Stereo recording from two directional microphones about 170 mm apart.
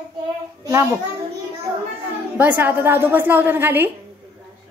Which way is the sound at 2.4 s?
10° right (ahead or behind).